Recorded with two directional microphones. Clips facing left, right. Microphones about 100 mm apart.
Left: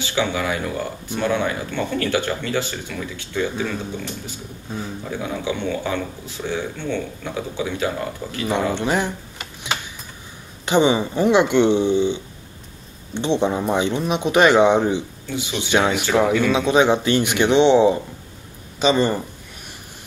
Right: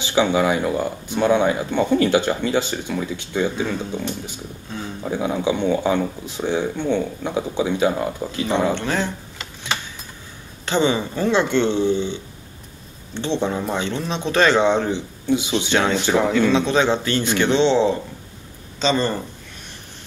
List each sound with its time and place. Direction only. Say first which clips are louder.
0.0 s speech: right 5 dB; 20° right (ahead or behind)
8.7 s speech: left 2 dB; 15° left (ahead or behind)
10.6 s speech: left 3 dB; 15° left (ahead or behind)
15.2 s speech: right 7 dB; 20° right (ahead or behind)
15.7 s speech: left 1 dB; 15° left (ahead or behind)